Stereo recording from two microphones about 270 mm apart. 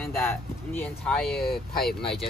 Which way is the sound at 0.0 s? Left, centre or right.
Centre.